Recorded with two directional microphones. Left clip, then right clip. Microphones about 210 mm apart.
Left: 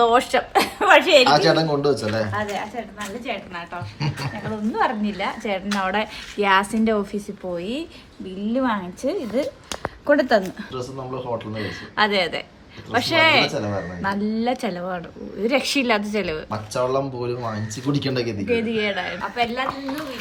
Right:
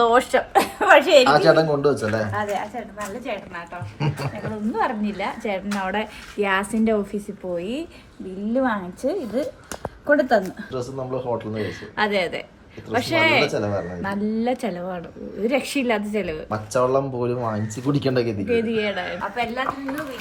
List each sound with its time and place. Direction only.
0.0 s speech: centre (ahead or behind)
10.1 s speech: 25° left (ahead or behind)
11.3 s speech: centre (ahead or behind)